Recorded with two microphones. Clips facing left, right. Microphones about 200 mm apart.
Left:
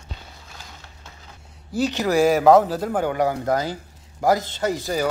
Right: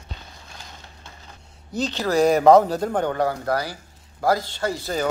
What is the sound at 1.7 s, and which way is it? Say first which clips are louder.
Speech: left 2 dB; 10° left (ahead or behind).